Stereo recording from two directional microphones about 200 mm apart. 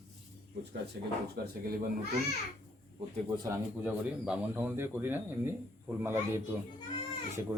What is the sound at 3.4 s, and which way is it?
Speech, 10° right (ahead or behind).